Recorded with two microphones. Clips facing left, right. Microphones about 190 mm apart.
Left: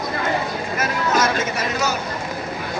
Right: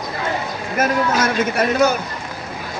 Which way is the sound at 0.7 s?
55° right (ahead or behind).